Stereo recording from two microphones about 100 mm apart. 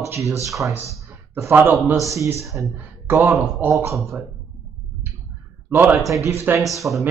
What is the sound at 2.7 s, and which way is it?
Speech, 20° right (ahead or behind).